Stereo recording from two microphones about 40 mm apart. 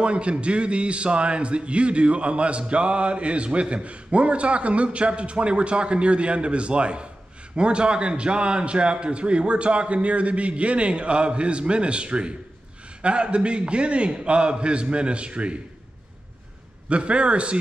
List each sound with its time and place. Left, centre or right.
0.0 s a man's voice: right
16.9 s a man's voice: right